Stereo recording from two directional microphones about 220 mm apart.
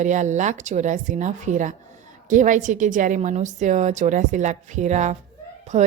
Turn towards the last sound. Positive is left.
turn(degrees=-30)  # may be behind; listen again after turning